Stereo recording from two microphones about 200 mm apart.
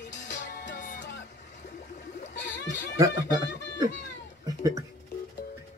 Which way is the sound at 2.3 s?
60° left (ahead or behind).